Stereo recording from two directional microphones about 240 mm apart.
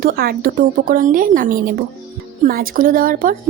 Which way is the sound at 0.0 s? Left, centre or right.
Right.